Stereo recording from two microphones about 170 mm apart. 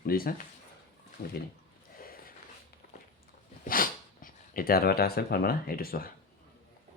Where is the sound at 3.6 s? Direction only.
55° left (ahead or behind).